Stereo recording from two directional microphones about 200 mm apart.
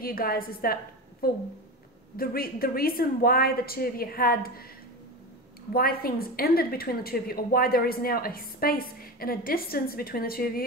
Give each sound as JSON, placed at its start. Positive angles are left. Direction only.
{"t": 0.0, "sound": "a woman's voice", "side_deg": 50}
{"t": 2.1, "sound": "a woman's voice", "side_deg": 50}
{"t": 5.7, "sound": "a woman's voice", "side_deg": 50}